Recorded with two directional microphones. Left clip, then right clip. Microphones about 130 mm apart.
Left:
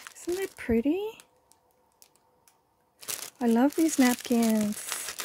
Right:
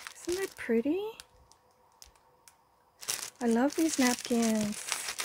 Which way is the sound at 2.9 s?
Centre (ahead or behind).